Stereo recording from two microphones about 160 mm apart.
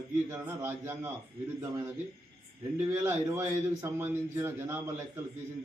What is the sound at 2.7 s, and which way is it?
A man's voice, 15° right (ahead or behind).